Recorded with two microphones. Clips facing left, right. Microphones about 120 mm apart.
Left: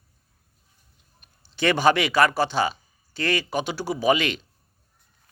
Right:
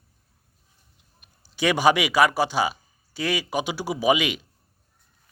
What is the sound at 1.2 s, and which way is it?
A man's voice, 10° right (ahead or behind).